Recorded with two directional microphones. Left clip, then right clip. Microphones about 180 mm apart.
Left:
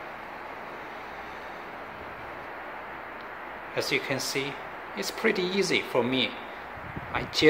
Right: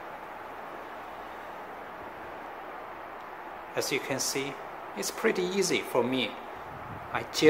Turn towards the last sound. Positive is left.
turn(degrees=-5)  # may be behind; listen again after turning